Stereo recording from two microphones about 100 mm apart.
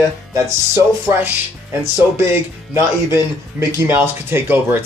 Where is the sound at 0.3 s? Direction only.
30° right (ahead or behind).